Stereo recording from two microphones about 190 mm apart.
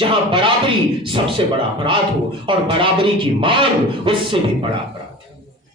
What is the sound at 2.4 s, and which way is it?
Speech, 25° right (ahead or behind).